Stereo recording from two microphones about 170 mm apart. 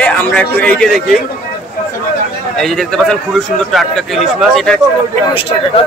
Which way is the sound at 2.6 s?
Centre (ahead or behind).